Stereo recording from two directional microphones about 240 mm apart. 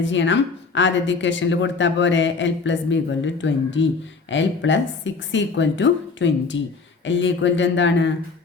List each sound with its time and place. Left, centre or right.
0.0 s speech: left